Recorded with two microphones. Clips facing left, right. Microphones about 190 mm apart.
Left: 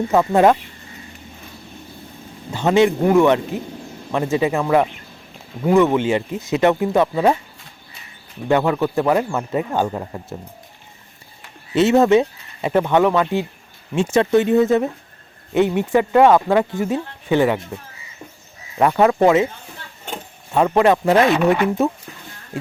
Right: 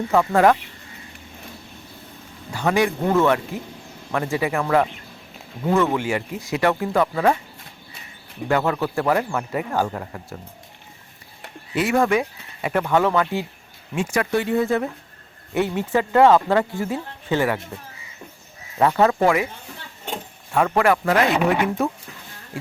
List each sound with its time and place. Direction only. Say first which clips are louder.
0.1 s speech: left 2 dB; 20° left (ahead or behind)
2.5 s speech: left 5 dB; 20° left (ahead or behind)
8.4 s speech: left 4 dB; 20° left (ahead or behind)
11.7 s speech: left 6 dB; 25° left (ahead or behind)
18.9 s speech: left 5 dB; 15° left (ahead or behind)
20.5 s speech: left 4 dB; 20° left (ahead or behind)